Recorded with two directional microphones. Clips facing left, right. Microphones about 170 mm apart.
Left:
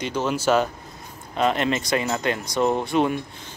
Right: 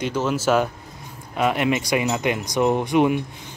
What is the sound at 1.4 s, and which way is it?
Speech, 10° right (ahead or behind).